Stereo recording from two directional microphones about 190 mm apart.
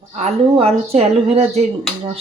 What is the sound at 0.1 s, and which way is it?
Speech, 35° right (ahead or behind).